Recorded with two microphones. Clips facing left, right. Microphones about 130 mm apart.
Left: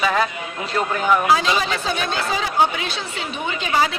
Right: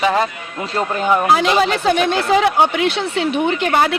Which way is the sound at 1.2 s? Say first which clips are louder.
Right 4 dB; 60° right (ahead or behind).